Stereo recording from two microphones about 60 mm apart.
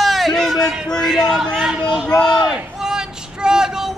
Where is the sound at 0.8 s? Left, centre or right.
Centre.